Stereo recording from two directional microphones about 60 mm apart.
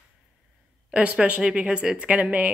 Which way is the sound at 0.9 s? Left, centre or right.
Centre.